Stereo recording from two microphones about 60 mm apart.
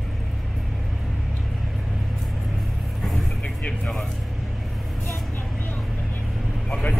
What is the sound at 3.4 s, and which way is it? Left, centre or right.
Vehicle, centre.